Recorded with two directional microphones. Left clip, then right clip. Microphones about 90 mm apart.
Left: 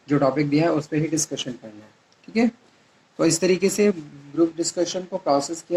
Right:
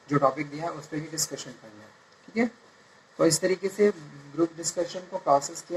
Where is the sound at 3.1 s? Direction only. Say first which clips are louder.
Left 3 dB; 25° left (ahead or behind).